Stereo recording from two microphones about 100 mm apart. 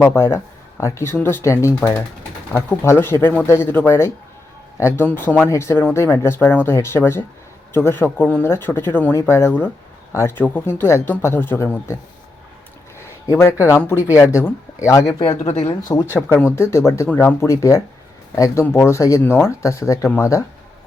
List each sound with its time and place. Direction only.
0.0 s speech: 25° left (ahead or behind)
2.5 s speech: 15° left (ahead or behind)
2.8 s speech: 25° left (ahead or behind)
13.3 s speech: 30° left (ahead or behind)
16.6 s speech: 25° left (ahead or behind)
18.6 s speech: 25° left (ahead or behind)